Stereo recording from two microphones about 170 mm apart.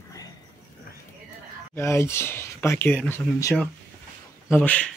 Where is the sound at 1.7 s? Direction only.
15° left (ahead or behind).